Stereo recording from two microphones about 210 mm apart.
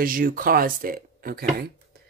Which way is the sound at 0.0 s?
40° right (ahead or behind).